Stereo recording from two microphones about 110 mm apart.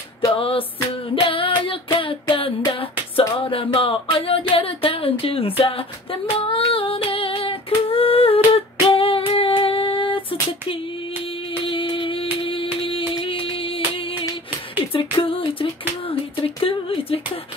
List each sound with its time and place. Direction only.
0.4 s music: 55° left (ahead or behind)
1.0 s a sound: 55° left (ahead or behind)
5.6 s music: 55° left (ahead or behind)
6.3 s female singing: 55° left (ahead or behind)
11.6 s music: 50° left (ahead or behind)
16.1 s a sound: 55° left (ahead or behind)